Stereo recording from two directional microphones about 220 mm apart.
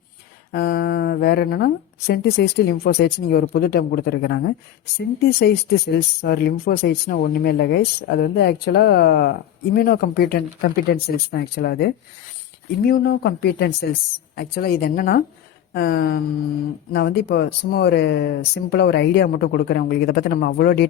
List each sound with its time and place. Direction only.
0.5 s speech: 40° left (ahead or behind)